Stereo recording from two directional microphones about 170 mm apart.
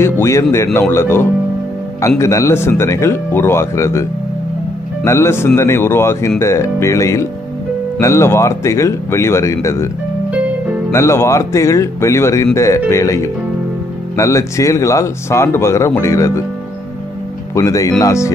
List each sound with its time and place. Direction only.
0.0 s speech: 15° left (ahead or behind)
5.0 s speech: 15° left (ahead or behind)
10.9 s speech: 15° left (ahead or behind)
17.6 s speech: 20° left (ahead or behind)